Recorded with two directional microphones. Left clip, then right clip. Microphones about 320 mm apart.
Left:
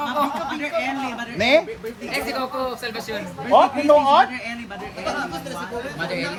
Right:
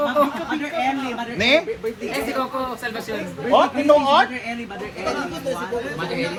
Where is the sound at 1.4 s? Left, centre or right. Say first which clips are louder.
Left 1 dB; left.